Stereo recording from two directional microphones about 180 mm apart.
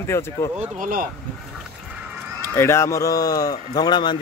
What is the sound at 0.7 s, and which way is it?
Speech, 50° right (ahead or behind).